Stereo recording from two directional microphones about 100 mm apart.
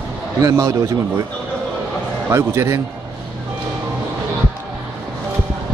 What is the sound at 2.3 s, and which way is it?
Speech, 25° right (ahead or behind).